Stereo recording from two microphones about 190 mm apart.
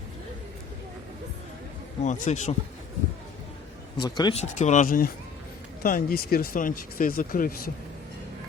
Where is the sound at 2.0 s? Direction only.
40° left (ahead or behind).